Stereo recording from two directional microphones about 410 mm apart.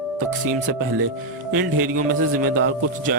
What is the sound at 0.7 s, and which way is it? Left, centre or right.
Speech, right.